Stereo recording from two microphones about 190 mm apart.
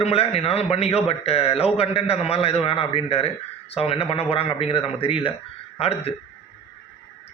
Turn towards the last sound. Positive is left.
turn(degrees=30)  # may be behind; listen again after turning